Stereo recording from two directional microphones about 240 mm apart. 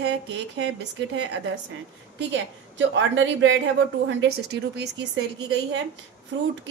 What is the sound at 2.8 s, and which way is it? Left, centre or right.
A woman's voice, right.